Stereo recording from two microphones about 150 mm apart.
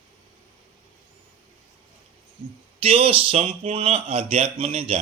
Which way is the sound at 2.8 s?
40° right (ahead or behind).